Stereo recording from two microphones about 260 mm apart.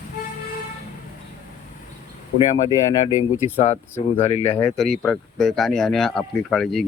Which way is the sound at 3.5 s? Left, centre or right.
Left.